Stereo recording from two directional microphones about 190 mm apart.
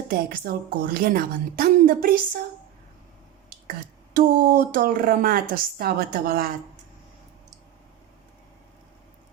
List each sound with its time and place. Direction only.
0.1 s speech: 50° right (ahead or behind)
4.1 s speech: 50° right (ahead or behind)